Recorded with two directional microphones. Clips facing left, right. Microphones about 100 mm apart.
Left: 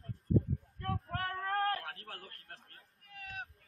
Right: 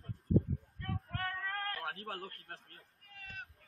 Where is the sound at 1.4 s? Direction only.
50° left (ahead or behind).